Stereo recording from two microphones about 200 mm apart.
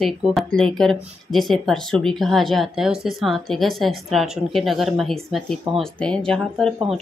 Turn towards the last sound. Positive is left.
turn(degrees=0)  # may be behind; listen again after turning